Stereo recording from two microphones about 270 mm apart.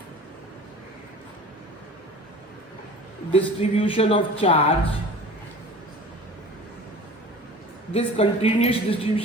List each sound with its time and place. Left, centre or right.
3.3 s speech: left
7.9 s speech: left